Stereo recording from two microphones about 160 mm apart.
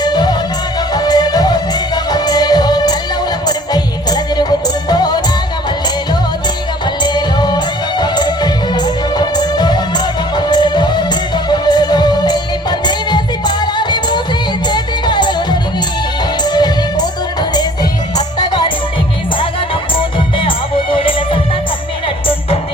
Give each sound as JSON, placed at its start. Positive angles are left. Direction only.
{"t": 0.0, "sound": "music", "side_deg": 25}
{"t": 7.0, "sound": "music", "side_deg": 25}
{"t": 18.3, "sound": "music", "side_deg": 30}
{"t": 20.0, "sound": "music", "side_deg": 35}